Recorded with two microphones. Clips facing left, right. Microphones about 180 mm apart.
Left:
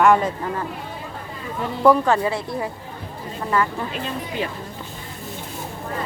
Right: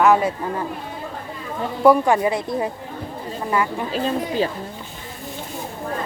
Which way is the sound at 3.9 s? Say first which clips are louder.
Right 6 dB; 35° right (ahead or behind).